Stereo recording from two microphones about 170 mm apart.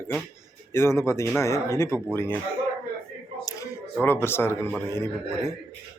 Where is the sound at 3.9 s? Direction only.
15° left (ahead or behind).